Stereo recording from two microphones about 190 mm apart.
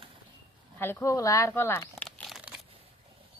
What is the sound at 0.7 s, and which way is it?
Speech, 10° left (ahead or behind).